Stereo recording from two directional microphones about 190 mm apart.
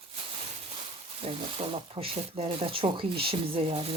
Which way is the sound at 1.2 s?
30° right (ahead or behind).